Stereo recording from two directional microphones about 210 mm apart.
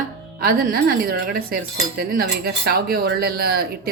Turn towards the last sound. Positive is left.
turn(degrees=-45)  # may be behind; listen again after turning